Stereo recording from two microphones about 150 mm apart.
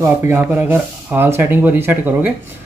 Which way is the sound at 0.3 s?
15° right (ahead or behind).